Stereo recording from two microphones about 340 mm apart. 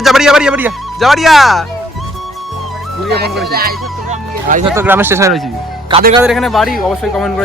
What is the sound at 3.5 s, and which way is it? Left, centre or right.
Music, right.